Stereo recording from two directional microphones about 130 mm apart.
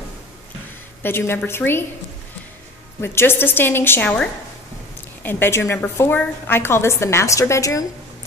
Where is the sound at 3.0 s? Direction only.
15° left (ahead or behind).